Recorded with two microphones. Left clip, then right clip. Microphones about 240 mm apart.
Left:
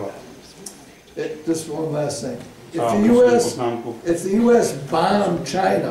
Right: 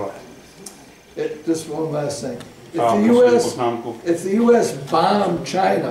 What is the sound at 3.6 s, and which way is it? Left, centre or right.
Speech, right.